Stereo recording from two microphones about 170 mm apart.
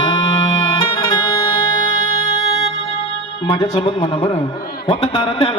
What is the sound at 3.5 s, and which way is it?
Music, 25° left (ahead or behind).